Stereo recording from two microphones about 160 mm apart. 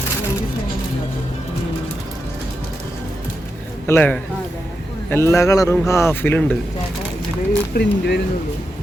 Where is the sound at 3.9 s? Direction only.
10° left (ahead or behind).